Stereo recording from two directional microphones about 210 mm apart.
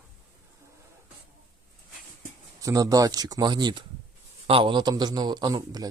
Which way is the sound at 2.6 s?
15° right (ahead or behind).